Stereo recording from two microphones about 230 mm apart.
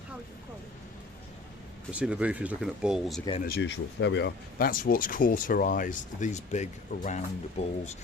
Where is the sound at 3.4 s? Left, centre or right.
Left.